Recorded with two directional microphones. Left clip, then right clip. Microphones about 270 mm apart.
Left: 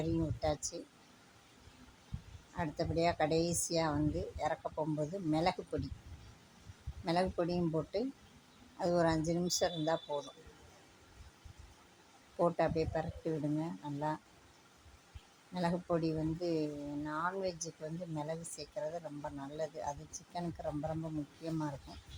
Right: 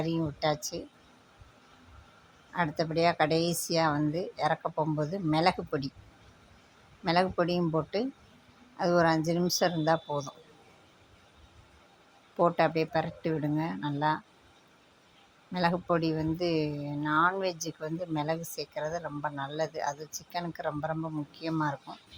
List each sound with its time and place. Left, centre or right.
0.3 s a woman's voice: centre
2.5 s a woman's voice: centre
7.0 s a woman's voice: centre
12.4 s speech: centre
15.5 s speech: centre